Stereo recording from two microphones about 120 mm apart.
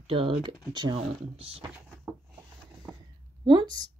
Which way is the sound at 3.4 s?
35° right (ahead or behind).